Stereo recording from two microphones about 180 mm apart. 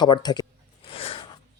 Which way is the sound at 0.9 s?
30° left (ahead or behind).